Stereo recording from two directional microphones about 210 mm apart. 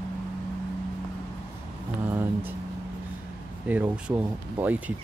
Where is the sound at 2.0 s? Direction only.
10° right (ahead or behind).